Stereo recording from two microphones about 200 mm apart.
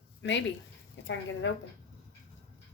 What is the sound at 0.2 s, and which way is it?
Speech, 65° left (ahead or behind).